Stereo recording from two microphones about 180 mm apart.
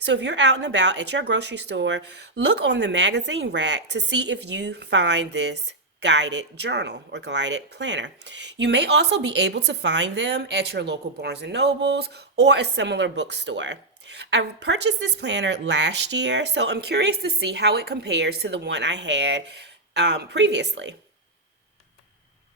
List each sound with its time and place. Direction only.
0.0 s speech: 75° right (ahead or behind)